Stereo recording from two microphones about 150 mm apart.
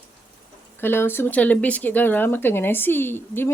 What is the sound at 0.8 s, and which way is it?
Speech, 15° left (ahead or behind).